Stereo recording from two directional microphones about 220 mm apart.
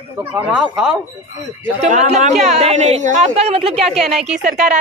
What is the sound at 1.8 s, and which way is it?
Speech, 30° right (ahead or behind).